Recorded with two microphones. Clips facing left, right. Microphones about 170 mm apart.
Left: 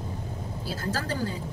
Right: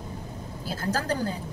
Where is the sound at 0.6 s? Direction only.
40° right (ahead or behind).